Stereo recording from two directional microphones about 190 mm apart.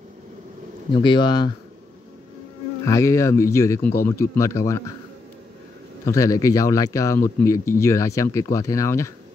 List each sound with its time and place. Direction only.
1.0 s speech: 25° left (ahead or behind)
2.8 s speech: 15° left (ahead or behind)
6.0 s speech: 15° left (ahead or behind)